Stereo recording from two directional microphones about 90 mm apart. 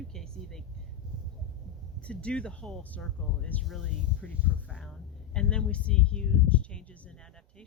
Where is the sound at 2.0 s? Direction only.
10° left (ahead or behind).